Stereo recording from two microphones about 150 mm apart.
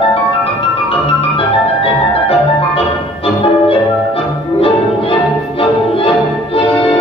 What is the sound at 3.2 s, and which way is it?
Music, 40° left (ahead or behind).